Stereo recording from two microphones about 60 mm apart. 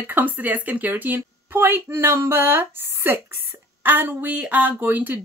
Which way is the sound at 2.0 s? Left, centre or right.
Right.